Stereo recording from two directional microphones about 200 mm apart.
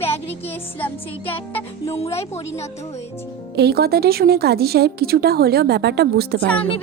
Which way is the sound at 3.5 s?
55° right (ahead or behind).